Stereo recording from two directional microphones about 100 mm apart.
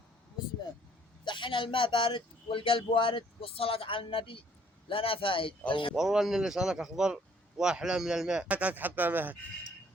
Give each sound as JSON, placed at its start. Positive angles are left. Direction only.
{"t": 1.2, "sound": "a man's voice", "side_deg": 50}
{"t": 5.9, "sound": "a man's voice", "side_deg": -5}